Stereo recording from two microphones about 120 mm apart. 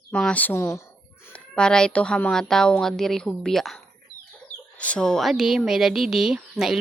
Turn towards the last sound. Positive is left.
turn(degrees=-5)  # may be behind; listen again after turning